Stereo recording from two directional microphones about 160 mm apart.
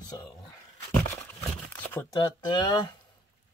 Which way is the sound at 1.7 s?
15° left (ahead or behind).